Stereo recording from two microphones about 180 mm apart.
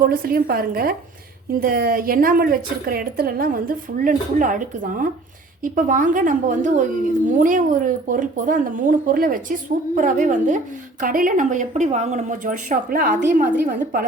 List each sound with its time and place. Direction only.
0.0 s a woman's voice: 55° right (ahead or behind)